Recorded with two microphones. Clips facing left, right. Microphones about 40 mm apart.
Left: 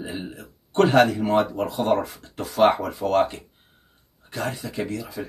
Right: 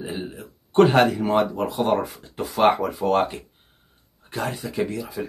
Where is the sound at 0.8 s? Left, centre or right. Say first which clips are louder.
Even; centre.